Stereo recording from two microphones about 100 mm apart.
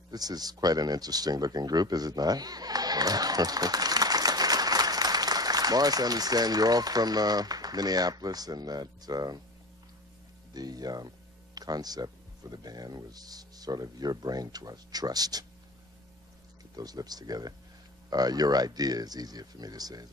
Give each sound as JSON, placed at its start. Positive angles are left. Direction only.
{"t": 0.1, "sound": "speech", "side_deg": -40}
{"t": 10.5, "sound": "speech", "side_deg": -40}
{"t": 16.7, "sound": "speech", "side_deg": -40}